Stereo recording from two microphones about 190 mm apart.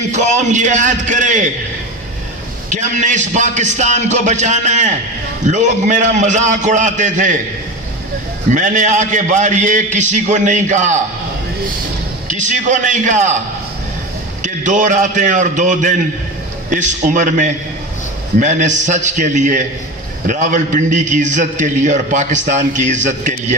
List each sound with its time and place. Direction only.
0.1 s a man's voice: 40° right (ahead or behind)
2.6 s a man's voice: 40° right (ahead or behind)
8.5 s a man's voice: 40° right (ahead or behind)
12.3 s a man's voice: 40° right (ahead or behind)
14.4 s a man's voice: 40° right (ahead or behind)